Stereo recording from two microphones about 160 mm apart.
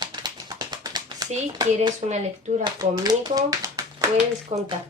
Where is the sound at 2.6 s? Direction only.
25° right (ahead or behind).